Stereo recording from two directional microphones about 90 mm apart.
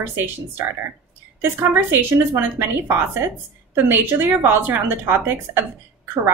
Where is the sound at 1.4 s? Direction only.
20° right (ahead or behind).